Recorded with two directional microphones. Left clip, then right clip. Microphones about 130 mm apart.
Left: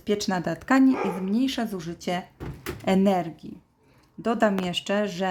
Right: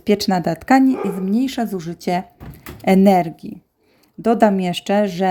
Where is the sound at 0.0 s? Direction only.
55° right (ahead or behind).